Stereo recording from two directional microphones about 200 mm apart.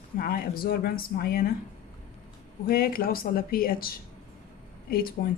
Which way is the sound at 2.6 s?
45° left (ahead or behind).